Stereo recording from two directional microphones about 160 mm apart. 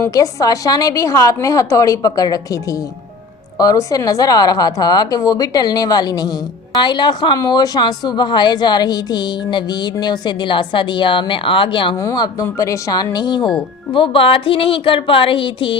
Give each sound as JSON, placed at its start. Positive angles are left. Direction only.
{"t": 0.0, "sound": "a woman's voice", "side_deg": 20}